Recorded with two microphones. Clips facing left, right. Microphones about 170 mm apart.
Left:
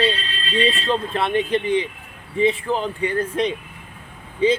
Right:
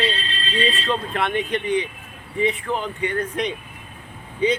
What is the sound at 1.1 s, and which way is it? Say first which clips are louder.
Speech: left 3 dB; 30° left (ahead or behind).